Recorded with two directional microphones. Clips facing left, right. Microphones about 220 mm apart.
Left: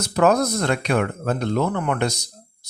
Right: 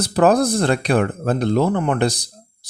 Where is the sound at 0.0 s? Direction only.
35° right (ahead or behind).